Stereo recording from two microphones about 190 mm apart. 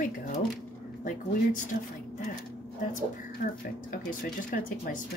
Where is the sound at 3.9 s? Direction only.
45° left (ahead or behind).